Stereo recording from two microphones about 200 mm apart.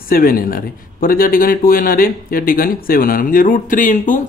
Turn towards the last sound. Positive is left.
turn(degrees=40)  # may be behind; listen again after turning